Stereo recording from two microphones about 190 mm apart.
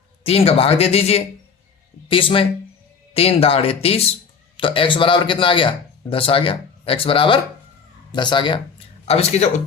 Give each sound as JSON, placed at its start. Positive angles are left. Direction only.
{"t": 0.3, "sound": "speech", "side_deg": 30}